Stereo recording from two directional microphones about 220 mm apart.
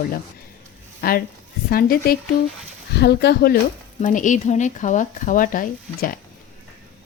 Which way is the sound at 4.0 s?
35° left (ahead or behind).